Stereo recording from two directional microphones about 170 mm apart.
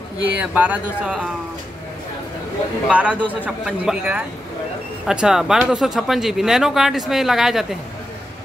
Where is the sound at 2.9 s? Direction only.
10° right (ahead or behind).